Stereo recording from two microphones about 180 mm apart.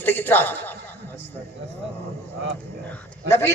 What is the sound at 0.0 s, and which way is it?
Chuckle, 10° left (ahead or behind).